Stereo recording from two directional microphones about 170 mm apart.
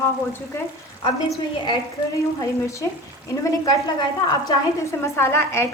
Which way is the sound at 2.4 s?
20° left (ahead or behind).